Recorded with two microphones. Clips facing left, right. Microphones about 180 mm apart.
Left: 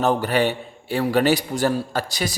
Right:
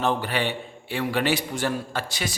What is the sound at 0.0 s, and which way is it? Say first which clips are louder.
A man's voice: left 5 dB; 40° left (ahead or behind).